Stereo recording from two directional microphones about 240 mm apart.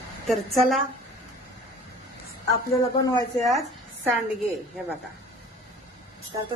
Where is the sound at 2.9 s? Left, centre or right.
Centre.